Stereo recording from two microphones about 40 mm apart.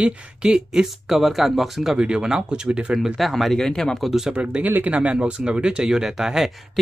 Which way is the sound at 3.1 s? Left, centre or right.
Centre.